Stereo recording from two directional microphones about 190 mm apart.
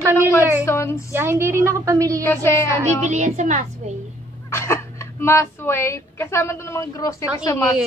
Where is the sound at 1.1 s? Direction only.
10° right (ahead or behind).